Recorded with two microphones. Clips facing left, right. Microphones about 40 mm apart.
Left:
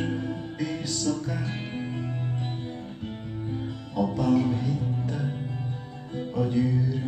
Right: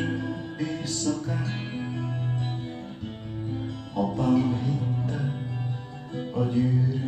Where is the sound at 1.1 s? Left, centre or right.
Centre.